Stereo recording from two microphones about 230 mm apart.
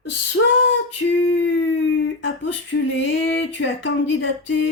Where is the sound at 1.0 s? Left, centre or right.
Left.